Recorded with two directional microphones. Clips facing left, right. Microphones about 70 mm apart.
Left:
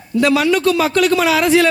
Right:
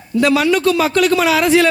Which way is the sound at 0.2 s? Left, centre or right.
Right.